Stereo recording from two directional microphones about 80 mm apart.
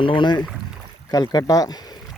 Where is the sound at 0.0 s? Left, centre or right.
Left.